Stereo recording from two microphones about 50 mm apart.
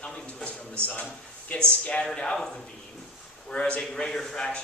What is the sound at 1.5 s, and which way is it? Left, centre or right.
Speech, left.